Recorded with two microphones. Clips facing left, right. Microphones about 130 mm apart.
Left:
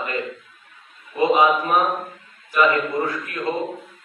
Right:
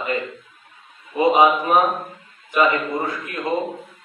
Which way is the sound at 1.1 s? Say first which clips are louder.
Right 2 dB; 15° right (ahead or behind).